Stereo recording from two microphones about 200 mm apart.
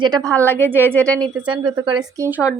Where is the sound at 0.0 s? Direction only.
20° right (ahead or behind).